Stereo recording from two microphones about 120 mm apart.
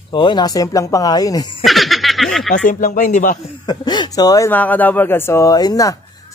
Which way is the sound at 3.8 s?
35° left (ahead or behind).